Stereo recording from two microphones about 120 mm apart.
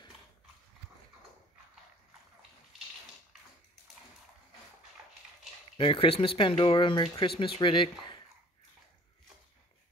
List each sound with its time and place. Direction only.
5.8 s speech: 50° left (ahead or behind)